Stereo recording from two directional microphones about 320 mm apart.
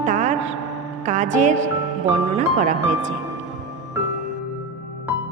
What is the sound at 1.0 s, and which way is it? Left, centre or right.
A woman's voice, right.